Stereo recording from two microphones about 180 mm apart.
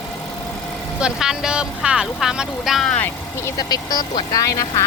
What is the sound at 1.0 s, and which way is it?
Speech, 5° right (ahead or behind).